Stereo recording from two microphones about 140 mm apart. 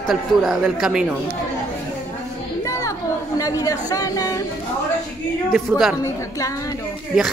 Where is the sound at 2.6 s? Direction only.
20° left (ahead or behind).